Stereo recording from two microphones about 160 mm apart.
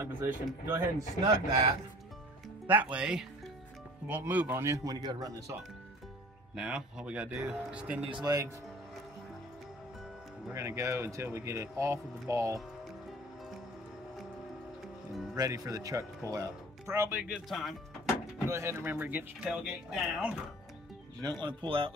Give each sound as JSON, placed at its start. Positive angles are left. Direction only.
{"t": 0.0, "sound": "speech", "side_deg": -15}
{"t": 2.6, "sound": "speech", "side_deg": -10}
{"t": 6.5, "sound": "speech", "side_deg": -5}
{"t": 8.1, "sound": "speech", "side_deg": -25}
{"t": 10.5, "sound": "speech", "side_deg": -15}
{"t": 15.3, "sound": "speech", "side_deg": -20}
{"t": 17.5, "sound": "speech", "side_deg": 0}
{"t": 18.5, "sound": "speech", "side_deg": -15}
{"t": 21.2, "sound": "speech", "side_deg": -25}